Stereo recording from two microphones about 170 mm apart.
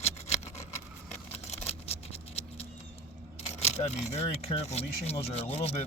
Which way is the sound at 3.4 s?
40° left (ahead or behind).